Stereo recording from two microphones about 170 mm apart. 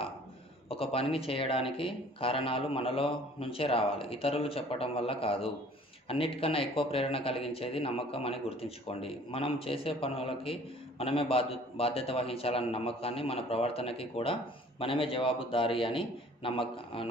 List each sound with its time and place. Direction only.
0.7 s speech: 35° left (ahead or behind)